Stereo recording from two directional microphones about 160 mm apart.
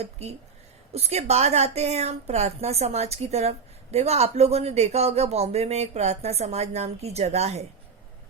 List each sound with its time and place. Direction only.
0.0 s speech: 40° right (ahead or behind)